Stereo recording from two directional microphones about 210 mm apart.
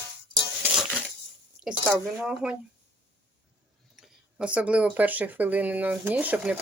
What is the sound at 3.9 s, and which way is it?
Speech, 5° right (ahead or behind).